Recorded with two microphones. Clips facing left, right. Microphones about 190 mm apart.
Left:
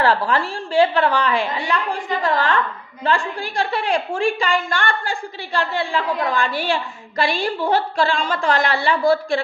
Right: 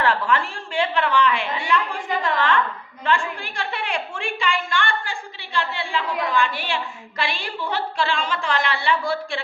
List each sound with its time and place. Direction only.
0.0 s a woman's voice: 35° left (ahead or behind)